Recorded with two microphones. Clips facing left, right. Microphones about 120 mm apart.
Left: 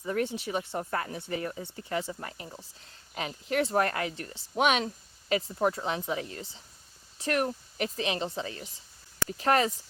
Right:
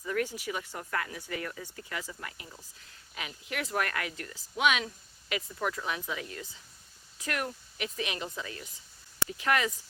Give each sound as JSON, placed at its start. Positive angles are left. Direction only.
{"t": 0.0, "sound": "speech", "side_deg": 30}